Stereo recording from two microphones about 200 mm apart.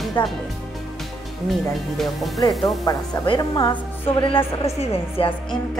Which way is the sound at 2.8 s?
20° left (ahead or behind).